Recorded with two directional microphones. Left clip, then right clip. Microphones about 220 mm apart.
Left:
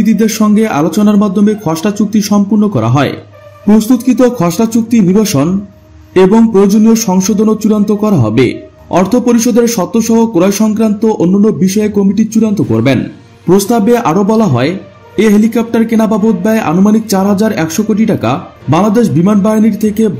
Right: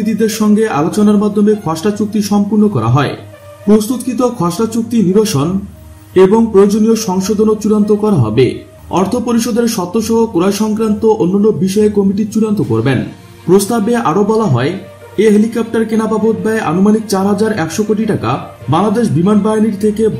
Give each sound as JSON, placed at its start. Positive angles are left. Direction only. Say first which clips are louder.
{"t": 0.2, "sound": "a man's voice", "louder": "right 3 dB", "side_deg": 35}
{"t": 4.4, "sound": "a man's voice", "louder": "left 3 dB", "side_deg": 30}